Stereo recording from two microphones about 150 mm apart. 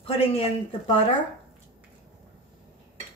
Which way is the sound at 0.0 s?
40° left (ahead or behind).